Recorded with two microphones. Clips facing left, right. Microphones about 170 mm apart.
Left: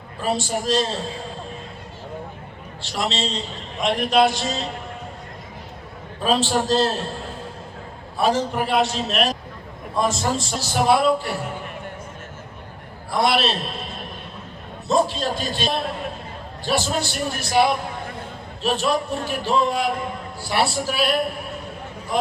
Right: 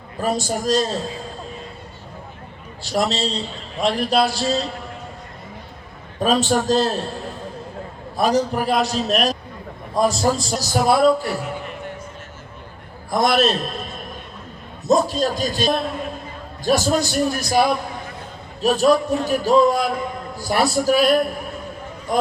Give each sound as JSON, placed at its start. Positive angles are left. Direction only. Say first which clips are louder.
{"t": 0.2, "sound": "a man's voice", "louder": "right 2 dB", "side_deg": -40}
{"t": 2.9, "sound": "a man's voice", "louder": "right 4 dB", "side_deg": -40}
{"t": 6.1, "sound": "a man's voice", "louder": "right 2 dB", "side_deg": -40}
{"t": 8.1, "sound": "a man's voice", "louder": "right 2 dB", "side_deg": -40}
{"t": 13.1, "sound": "a man's voice", "louder": "right 3 dB", "side_deg": -45}
{"t": 14.8, "sound": "a man's voice", "louder": "right 3 dB", "side_deg": -40}